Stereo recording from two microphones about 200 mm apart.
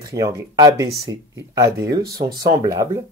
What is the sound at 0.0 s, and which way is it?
Speech, 20° right (ahead or behind).